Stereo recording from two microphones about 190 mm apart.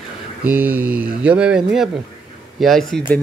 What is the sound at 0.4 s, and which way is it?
Speech, 10° right (ahead or behind).